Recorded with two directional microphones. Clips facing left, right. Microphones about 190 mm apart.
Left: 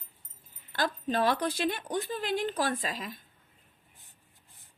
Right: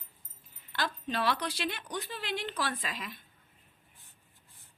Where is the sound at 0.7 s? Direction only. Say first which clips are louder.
Left 5 dB; 45° left (ahead or behind).